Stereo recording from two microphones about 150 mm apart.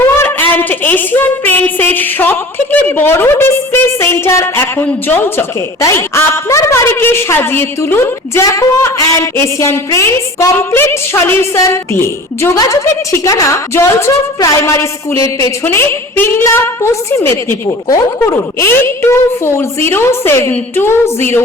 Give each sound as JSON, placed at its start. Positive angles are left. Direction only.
{"t": 0.0, "sound": "a woman's voice", "side_deg": 15}